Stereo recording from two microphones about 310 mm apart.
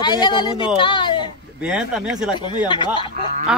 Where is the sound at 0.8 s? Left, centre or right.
Centre.